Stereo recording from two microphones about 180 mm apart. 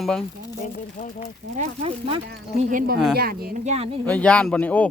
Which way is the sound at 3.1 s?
55° right (ahead or behind).